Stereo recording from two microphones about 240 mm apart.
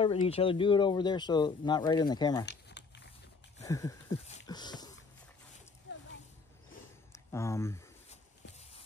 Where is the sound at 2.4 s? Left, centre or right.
Left.